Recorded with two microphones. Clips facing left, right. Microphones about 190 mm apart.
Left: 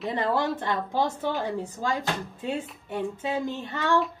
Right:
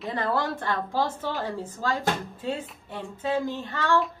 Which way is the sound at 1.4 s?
20° left (ahead or behind).